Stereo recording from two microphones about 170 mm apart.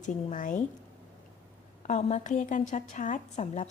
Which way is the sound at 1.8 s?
45° left (ahead or behind).